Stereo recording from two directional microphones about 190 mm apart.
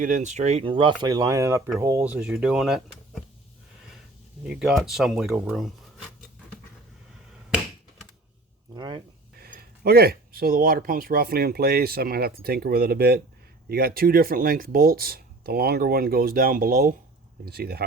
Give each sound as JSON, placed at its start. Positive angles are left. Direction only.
{"t": 0.0, "sound": "speech", "side_deg": -40}
{"t": 4.4, "sound": "speech", "side_deg": 0}
{"t": 8.7, "sound": "speech", "side_deg": -25}
{"t": 9.4, "sound": "speech", "side_deg": -55}